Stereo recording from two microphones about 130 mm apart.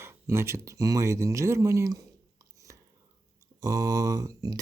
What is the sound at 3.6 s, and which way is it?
Speech, 25° right (ahead or behind).